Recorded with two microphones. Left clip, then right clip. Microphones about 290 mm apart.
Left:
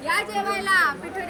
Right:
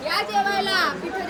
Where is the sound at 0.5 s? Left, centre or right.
Left.